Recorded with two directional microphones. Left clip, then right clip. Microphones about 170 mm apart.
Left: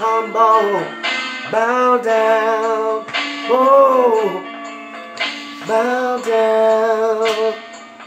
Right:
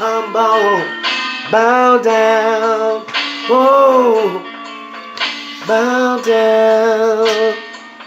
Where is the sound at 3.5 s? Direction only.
20° right (ahead or behind).